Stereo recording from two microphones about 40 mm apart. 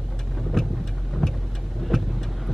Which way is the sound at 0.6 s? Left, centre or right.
Centre.